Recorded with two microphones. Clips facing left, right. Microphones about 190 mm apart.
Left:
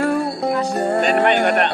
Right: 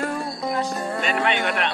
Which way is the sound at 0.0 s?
65° left (ahead or behind).